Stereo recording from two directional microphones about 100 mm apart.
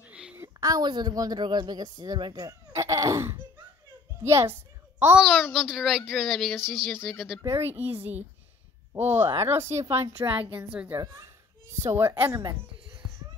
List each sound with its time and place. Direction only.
0.0 s a sound: 10° right (ahead or behind)
0.6 s a woman's voice: 40° right (ahead or behind)
4.2 s a sound: 30° right (ahead or behind)
5.2 s a child's voice: centre (ahead or behind)
7.4 s a woman's voice: 25° right (ahead or behind)
10.5 s a woman's voice: 15° right (ahead or behind)
11.0 s a child's voice: 30° right (ahead or behind)